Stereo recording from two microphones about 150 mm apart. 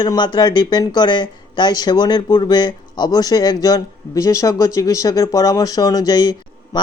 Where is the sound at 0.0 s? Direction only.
30° left (ahead or behind).